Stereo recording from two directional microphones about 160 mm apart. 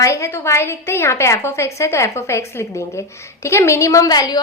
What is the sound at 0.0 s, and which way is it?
A woman's voice, 20° left (ahead or behind).